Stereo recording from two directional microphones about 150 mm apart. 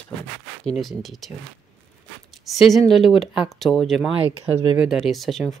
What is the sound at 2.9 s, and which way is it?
Speech, centre (ahead or behind).